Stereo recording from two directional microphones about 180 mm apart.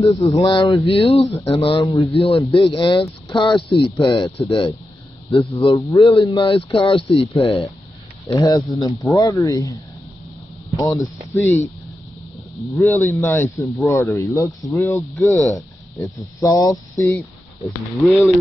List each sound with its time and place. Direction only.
0.1 s speech: 15° left (ahead or behind)
0.4 s speech: 30° left (ahead or behind)
5.9 s speech: 15° left (ahead or behind)
6.2 s speech: 30° left (ahead or behind)
8.3 s speech: 20° left (ahead or behind)
10.8 s speech: 20° left (ahead or behind)
12.7 s speech: 15° left (ahead or behind)